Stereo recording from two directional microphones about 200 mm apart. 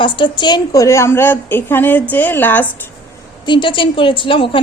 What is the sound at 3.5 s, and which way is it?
A woman's voice, 25° left (ahead or behind).